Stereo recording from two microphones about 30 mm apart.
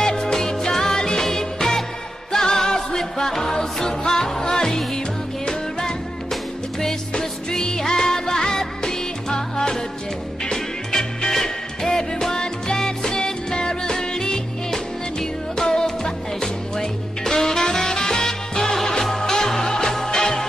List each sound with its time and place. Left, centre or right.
0.0 s music: centre